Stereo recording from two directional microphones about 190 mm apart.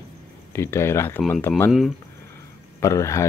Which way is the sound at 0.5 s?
15° left (ahead or behind).